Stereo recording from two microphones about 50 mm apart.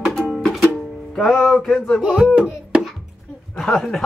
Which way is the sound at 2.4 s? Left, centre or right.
Centre.